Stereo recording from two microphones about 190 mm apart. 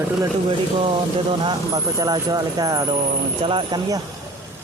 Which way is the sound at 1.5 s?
20° right (ahead or behind).